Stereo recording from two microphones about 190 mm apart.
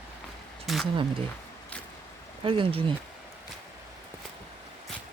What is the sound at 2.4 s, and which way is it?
Speech, 25° right (ahead or behind).